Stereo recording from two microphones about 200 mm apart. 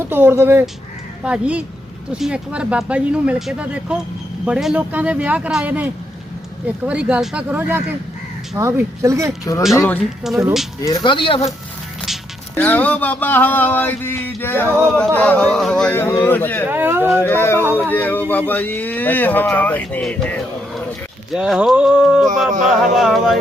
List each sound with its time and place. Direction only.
0.1 s speech: 10° right (ahead or behind)
9.4 s speech: 15° left (ahead or behind)
10.3 s speech: centre (ahead or behind)
10.8 s speech: 20° left (ahead or behind)
12.5 s speech: 10° left (ahead or behind)
16.6 s speech: 10° right (ahead or behind)
17.2 s speech: 10° left (ahead or behind)